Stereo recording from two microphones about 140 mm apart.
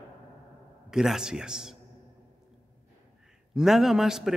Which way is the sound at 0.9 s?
5° right (ahead or behind).